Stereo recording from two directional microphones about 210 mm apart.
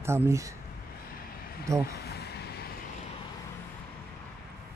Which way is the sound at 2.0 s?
50° left (ahead or behind).